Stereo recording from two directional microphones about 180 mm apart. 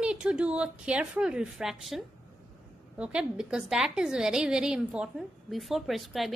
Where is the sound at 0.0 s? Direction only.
5° right (ahead or behind).